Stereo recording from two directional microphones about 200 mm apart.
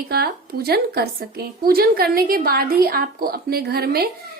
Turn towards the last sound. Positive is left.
turn(degrees=-50)  # may be behind; listen again after turning